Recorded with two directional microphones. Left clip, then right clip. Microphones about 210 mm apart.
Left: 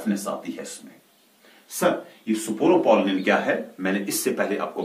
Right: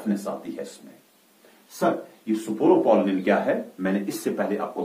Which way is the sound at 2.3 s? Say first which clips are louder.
Even; 15° right (ahead or behind).